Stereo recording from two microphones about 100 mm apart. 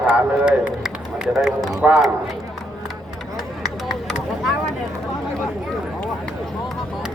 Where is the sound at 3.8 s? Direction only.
Centre (ahead or behind).